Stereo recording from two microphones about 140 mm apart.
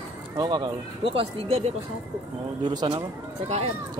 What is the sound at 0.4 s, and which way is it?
Speech, 30° right (ahead or behind).